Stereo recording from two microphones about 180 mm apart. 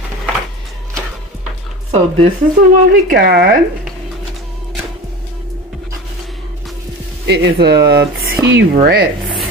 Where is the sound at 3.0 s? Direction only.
55° right (ahead or behind).